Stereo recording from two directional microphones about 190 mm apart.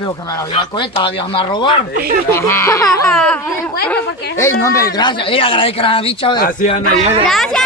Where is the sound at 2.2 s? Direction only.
15° left (ahead or behind).